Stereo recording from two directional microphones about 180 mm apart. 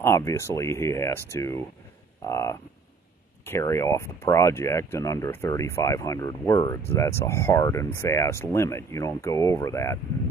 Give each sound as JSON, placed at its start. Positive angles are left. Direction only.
{"t": 0.0, "sound": "speech", "side_deg": 15}